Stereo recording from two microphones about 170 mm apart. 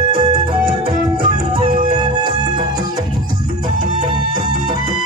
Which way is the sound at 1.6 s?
30° right (ahead or behind).